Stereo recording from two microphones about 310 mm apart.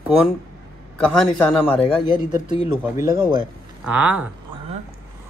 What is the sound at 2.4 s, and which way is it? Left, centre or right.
A man's voice, centre.